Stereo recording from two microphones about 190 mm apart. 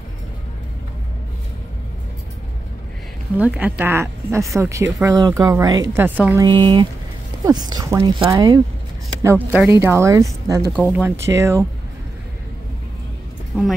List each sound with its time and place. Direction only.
3.3 s speech: 10° right (ahead or behind)
6.4 s speech: 25° right (ahead or behind)
13.5 s speech: 5° right (ahead or behind)